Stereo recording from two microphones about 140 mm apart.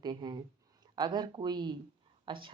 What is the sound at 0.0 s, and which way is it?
Speech, 30° right (ahead or behind).